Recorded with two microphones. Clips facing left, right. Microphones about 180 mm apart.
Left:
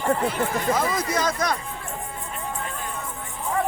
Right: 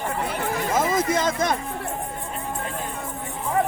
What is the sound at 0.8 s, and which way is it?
Speech, 25° right (ahead or behind).